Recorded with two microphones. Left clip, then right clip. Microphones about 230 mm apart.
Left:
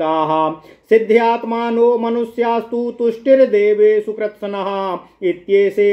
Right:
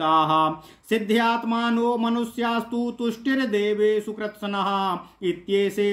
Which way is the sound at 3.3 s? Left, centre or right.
Right.